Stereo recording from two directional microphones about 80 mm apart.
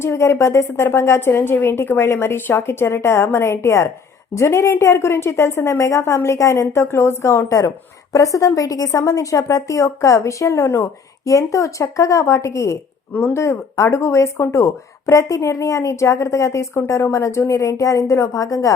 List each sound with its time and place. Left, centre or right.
0.0 s a woman's voice: left
13.1 s speech: left
13.4 s speech: left